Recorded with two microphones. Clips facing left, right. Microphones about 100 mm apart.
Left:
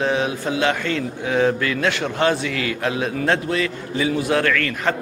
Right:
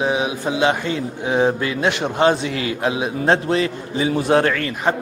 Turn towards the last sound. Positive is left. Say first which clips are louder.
# right 1 dB
turn(degrees=-20)  # may be behind; listen again after turning